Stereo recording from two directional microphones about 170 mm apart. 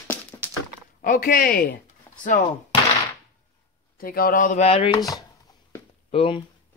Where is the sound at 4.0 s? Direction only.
60° left (ahead or behind).